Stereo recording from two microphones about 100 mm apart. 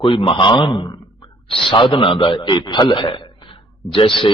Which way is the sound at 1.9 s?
60° left (ahead or behind).